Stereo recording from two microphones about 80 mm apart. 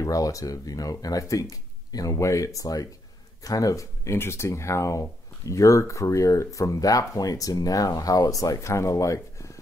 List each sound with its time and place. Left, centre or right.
0.0 s speech: left